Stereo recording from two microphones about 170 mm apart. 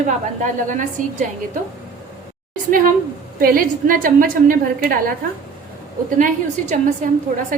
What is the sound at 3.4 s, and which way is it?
A woman's voice, 55° right (ahead or behind).